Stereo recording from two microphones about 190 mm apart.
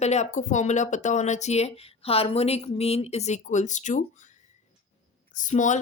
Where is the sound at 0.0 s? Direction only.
35° left (ahead or behind).